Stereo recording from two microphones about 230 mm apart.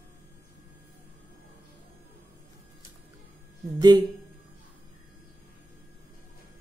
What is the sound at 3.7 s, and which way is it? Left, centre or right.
Speech, centre.